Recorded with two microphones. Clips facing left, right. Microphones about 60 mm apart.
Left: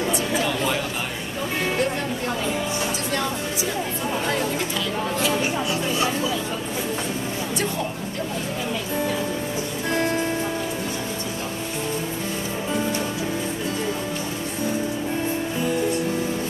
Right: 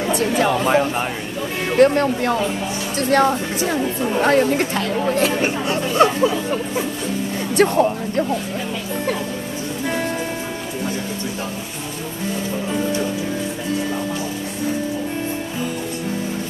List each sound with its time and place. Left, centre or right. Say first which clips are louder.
0.1 s speech: right 5 dB; right
1.8 s speech: right 10 dB; right
7.5 s speech: right 13 dB; right